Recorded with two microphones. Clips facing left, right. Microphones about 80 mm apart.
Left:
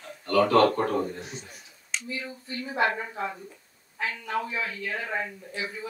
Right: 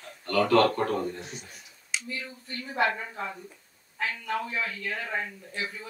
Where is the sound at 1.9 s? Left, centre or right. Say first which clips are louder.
Even; centre.